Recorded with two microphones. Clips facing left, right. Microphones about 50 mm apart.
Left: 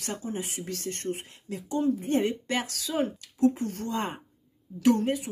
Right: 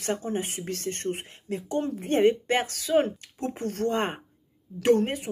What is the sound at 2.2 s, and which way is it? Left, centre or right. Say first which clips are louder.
Speech: right 7 dB; right.